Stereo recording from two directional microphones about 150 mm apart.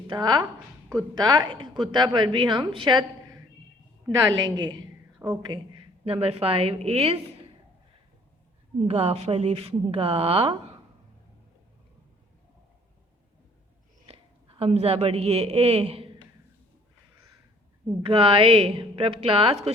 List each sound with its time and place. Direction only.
0.1 s a woman's voice: 30° right (ahead or behind)
5.2 s speech: 10° right (ahead or behind)
6.1 s a woman's voice: 40° right (ahead or behind)
8.9 s a woman's voice: 45° right (ahead or behind)
14.1 s a woman's voice: 40° right (ahead or behind)
18.0 s a woman's voice: 35° right (ahead or behind)